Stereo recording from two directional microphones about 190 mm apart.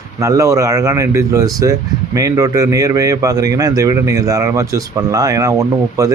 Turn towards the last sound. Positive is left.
turn(degrees=-15)  # may be behind; listen again after turning